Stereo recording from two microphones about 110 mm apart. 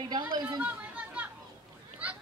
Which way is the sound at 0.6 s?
15° right (ahead or behind).